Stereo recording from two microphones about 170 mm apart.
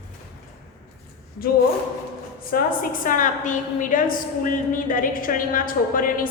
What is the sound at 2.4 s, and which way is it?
A woman's voice, 60° left (ahead or behind).